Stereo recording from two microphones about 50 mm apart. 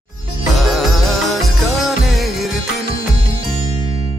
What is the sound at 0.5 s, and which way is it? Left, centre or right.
Music, centre.